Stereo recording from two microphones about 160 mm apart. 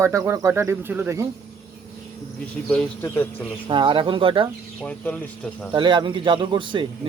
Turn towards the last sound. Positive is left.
turn(degrees=-30)  # may be behind; listen again after turning